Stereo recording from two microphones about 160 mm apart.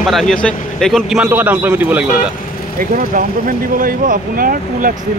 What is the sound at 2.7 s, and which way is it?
Speech, 60° right (ahead or behind).